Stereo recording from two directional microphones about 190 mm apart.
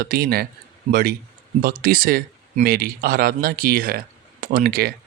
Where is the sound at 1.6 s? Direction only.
50° right (ahead or behind).